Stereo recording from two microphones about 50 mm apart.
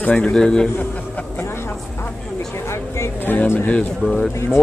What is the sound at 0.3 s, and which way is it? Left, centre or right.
Speech, centre.